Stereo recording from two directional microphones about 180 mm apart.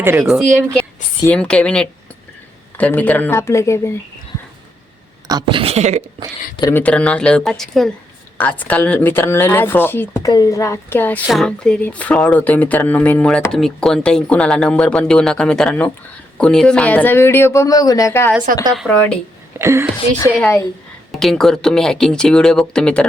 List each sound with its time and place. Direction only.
0.0 s speech: 15° right (ahead or behind)
0.3 s speech: centre (ahead or behind)
5.3 s a woman's voice: 25° right (ahead or behind)
6.6 s speech: 15° left (ahead or behind)
11.2 s speech: centre (ahead or behind)
18.7 s speech: 5° left (ahead or behind)
19.5 s speech: 15° right (ahead or behind)
20.1 s speech: 20° left (ahead or behind)
21.1 s speech: centre (ahead or behind)